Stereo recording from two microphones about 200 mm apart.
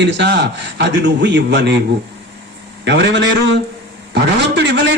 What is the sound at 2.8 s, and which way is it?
A man's voice, 60° right (ahead or behind).